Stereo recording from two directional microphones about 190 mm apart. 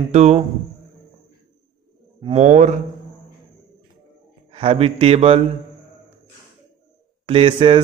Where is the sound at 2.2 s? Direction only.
35° right (ahead or behind).